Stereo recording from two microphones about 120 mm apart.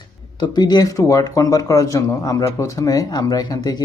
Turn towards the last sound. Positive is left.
turn(degrees=30)  # may be behind; listen again after turning